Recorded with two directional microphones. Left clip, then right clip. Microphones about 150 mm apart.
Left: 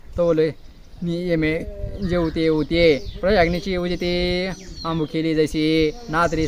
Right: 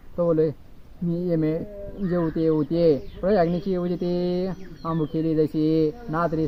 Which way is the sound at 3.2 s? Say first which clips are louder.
Left 4 dB; 15° left (ahead or behind).